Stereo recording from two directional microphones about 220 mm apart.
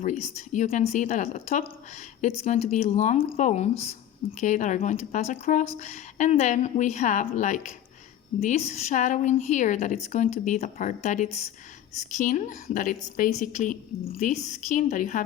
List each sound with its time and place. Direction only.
0.0 s speech: 30° left (ahead or behind)